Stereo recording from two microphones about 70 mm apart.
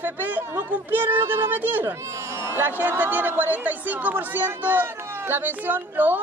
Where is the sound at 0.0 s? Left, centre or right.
Right.